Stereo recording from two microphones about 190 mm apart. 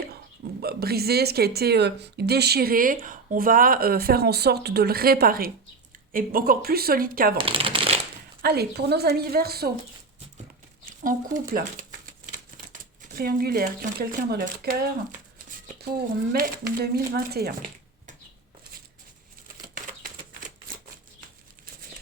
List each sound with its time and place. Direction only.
0.6 s speech: 55° right (ahead or behind)
7.3 s speech: 30° right (ahead or behind)
8.4 s speech: 55° right (ahead or behind)
11.0 s speech: 45° right (ahead or behind)